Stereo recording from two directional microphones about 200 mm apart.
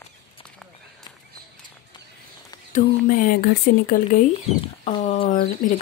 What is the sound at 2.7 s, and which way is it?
Speech, 45° left (ahead or behind).